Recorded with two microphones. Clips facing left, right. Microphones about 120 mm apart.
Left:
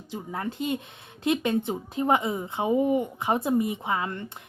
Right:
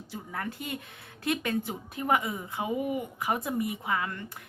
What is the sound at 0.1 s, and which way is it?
A woman's voice, 20° left (ahead or behind).